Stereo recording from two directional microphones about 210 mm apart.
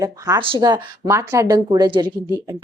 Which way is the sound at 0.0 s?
20° right (ahead or behind).